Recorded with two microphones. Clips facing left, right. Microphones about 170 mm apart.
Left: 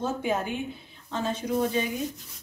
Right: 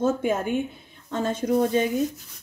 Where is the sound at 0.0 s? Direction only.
45° right (ahead or behind).